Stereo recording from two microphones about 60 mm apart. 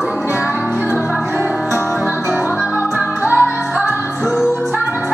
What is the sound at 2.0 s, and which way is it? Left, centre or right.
Music, right.